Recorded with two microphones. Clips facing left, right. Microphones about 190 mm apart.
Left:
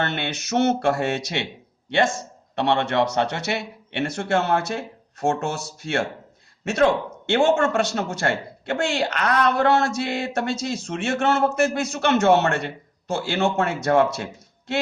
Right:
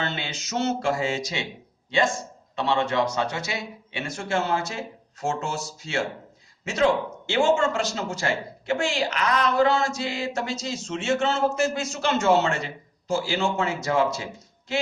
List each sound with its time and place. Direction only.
0.0 s a man's voice: 65° left (ahead or behind)
2.6 s a man's voice: 65° left (ahead or behind)